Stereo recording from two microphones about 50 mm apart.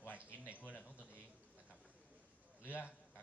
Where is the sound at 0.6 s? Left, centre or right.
Left.